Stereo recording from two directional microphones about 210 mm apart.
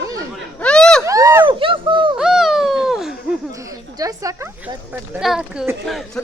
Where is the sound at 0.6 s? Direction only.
5° left (ahead or behind).